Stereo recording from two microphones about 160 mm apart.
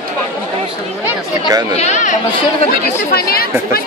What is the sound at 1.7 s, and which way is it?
Speech, 45° left (ahead or behind).